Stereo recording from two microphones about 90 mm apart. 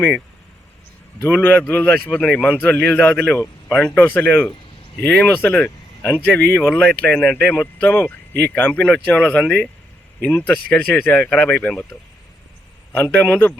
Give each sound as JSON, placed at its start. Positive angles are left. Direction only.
{"t": 1.2, "sound": "a man's voice", "side_deg": 25}
{"t": 5.6, "sound": "a sound", "side_deg": 20}
{"t": 6.3, "sound": "a man's voice", "side_deg": 25}
{"t": 12.9, "sound": "a man's voice", "side_deg": 20}